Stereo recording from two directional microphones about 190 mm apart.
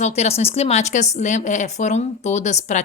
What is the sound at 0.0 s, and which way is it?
Speech, 35° left (ahead or behind).